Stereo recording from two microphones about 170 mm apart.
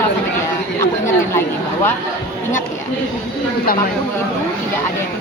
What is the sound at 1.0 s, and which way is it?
Speech, 15° left (ahead or behind).